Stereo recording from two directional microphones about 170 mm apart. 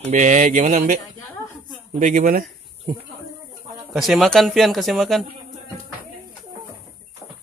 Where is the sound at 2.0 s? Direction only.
50° right (ahead or behind).